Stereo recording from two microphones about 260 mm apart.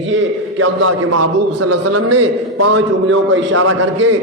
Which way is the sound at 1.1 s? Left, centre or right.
Right.